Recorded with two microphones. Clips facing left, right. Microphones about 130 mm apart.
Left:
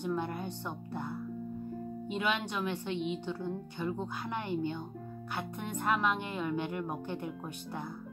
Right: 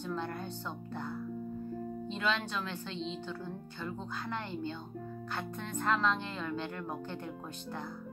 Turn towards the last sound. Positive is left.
turn(degrees=10)  # may be behind; listen again after turning